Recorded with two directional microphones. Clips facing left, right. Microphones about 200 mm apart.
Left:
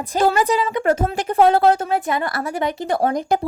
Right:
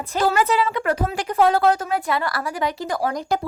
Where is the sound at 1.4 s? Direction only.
25° left (ahead or behind).